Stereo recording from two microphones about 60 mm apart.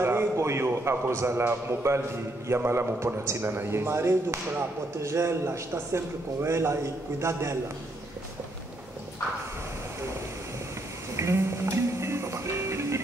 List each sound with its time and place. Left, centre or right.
0.0 s a sound: right
0.8 s a man's voice: right
11.1 s music: right